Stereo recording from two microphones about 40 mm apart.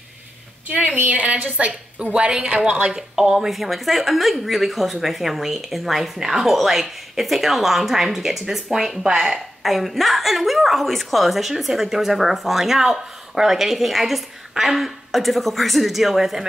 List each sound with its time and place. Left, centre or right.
0.7 s a sound: right
1.1 s a woman's voice: right
2.9 s a woman's voice: centre